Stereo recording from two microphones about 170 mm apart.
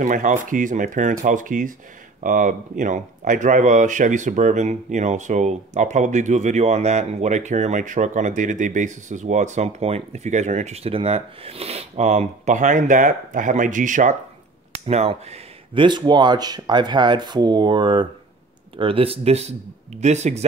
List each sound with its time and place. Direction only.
0.0 s speech: 45° right (ahead or behind)
14.9 s speech: 40° right (ahead or behind)